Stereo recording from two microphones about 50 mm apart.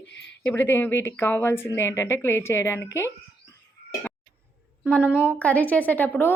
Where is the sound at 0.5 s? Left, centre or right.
Left.